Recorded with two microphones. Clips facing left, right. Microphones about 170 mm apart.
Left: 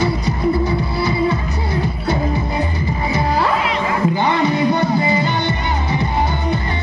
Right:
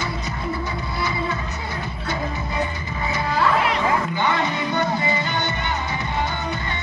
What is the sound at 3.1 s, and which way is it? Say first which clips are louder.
Music: left 3 dB; 30° left (ahead or behind).